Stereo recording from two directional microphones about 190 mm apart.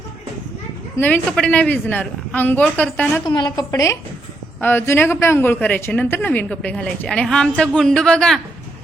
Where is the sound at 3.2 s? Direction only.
25° left (ahead or behind).